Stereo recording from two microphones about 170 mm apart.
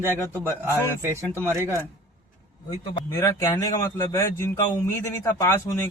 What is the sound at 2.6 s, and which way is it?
A man's voice, 20° left (ahead or behind).